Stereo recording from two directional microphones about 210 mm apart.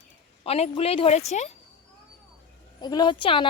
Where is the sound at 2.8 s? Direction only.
20° left (ahead or behind).